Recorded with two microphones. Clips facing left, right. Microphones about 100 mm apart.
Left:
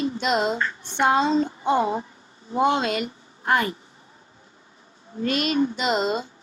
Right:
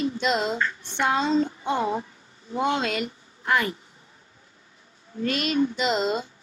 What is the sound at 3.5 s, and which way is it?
Child singing, 40° left (ahead or behind).